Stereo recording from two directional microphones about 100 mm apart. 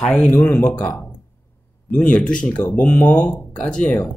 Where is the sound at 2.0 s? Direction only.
10° left (ahead or behind).